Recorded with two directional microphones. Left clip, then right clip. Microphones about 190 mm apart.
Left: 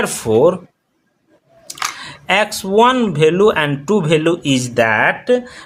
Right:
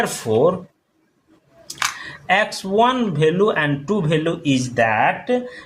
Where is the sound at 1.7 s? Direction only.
35° left (ahead or behind).